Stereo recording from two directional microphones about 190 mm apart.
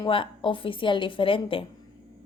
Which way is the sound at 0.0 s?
25° left (ahead or behind).